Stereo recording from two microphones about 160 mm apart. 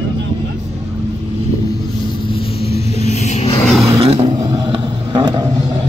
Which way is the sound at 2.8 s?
40° left (ahead or behind).